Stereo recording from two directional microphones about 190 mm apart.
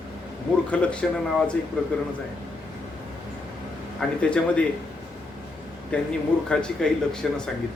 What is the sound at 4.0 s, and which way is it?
Speech, 5° left (ahead or behind).